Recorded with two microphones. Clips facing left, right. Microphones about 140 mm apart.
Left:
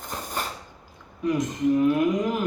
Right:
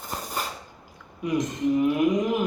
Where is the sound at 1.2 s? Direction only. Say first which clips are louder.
Left 2 dB; 15° right (ahead or behind).